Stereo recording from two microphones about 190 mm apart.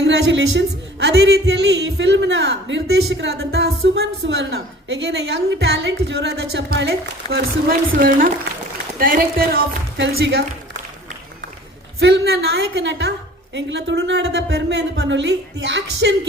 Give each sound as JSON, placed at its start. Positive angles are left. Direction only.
{"t": 0.0, "sound": "a woman's voice", "side_deg": -65}
{"t": 11.9, "sound": "a woman's voice", "side_deg": -60}